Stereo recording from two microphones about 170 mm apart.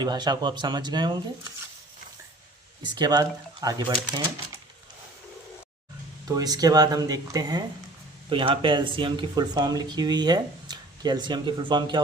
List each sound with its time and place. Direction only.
0.0 s speech: 25° right (ahead or behind)
2.8 s speech: 25° right (ahead or behind)
6.2 s speech: 20° right (ahead or behind)